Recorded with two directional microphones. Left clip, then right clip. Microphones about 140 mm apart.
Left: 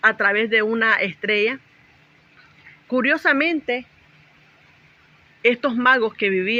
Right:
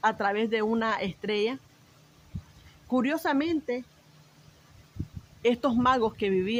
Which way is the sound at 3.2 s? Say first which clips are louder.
Left 9 dB; 20° right (ahead or behind).